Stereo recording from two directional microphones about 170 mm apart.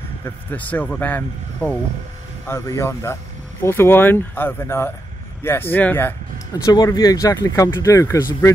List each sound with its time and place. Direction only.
0.2 s speech: 10° left (ahead or behind)